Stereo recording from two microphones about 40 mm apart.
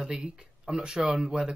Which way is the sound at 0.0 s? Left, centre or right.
Centre.